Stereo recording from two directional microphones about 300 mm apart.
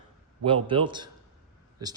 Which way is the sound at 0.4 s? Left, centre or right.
Centre.